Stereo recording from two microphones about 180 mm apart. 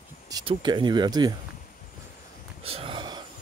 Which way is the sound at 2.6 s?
30° right (ahead or behind).